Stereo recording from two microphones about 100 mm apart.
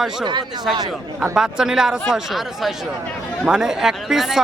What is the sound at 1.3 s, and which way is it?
Speech, 5° right (ahead or behind).